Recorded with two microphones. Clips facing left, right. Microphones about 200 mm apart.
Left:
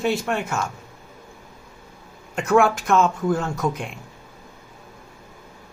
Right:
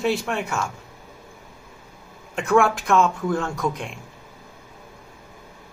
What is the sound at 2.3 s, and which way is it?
Speech, centre (ahead or behind).